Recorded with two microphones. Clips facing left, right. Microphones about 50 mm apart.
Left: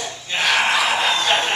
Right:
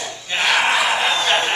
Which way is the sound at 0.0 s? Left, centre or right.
Centre.